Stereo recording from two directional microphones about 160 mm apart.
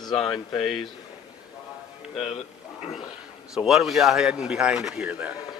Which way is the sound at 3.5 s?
Centre (ahead or behind).